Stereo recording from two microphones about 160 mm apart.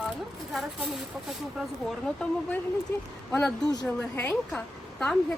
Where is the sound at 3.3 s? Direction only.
10° left (ahead or behind).